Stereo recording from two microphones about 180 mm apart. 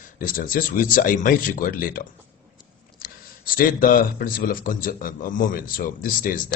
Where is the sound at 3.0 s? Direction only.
55° left (ahead or behind).